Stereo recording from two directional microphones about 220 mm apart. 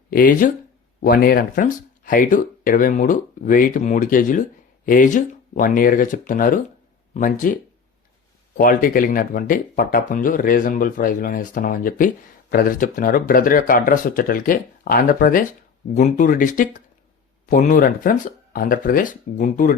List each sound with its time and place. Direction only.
0.1 s speech: 40° left (ahead or behind)